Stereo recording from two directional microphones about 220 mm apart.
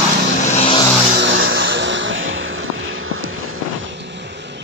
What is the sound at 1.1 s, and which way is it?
Vehicle, 55° right (ahead or behind).